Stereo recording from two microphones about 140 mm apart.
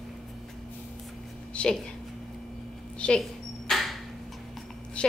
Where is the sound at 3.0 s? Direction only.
5° left (ahead or behind).